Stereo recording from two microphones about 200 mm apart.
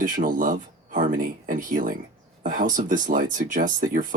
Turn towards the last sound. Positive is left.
turn(degrees=-40)  # may be behind; listen again after turning